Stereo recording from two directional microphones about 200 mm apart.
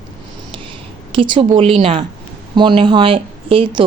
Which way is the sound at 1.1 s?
25° right (ahead or behind).